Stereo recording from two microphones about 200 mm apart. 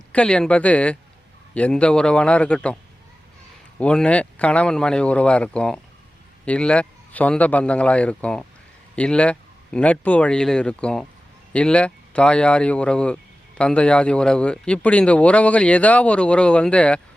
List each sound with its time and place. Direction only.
0.1 s speech: 5° left (ahead or behind)
3.8 s speech: 5° left (ahead or behind)